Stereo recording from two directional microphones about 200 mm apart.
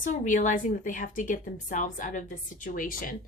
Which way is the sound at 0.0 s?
40° left (ahead or behind).